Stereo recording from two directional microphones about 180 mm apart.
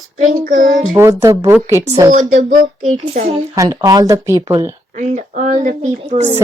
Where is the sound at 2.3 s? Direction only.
45° right (ahead or behind).